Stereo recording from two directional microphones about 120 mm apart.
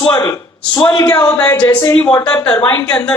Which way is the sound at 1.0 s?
15° left (ahead or behind).